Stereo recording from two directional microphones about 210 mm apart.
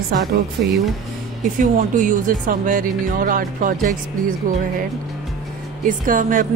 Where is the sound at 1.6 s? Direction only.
35° right (ahead or behind).